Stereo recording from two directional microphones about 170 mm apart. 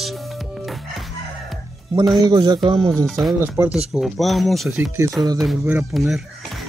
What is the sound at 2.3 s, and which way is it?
Speech, 25° right (ahead or behind).